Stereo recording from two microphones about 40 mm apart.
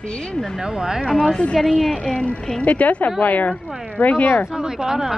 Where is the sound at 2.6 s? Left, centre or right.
Left.